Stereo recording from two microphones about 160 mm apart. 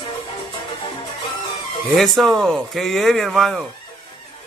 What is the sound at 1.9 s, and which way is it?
Speech, centre (ahead or behind).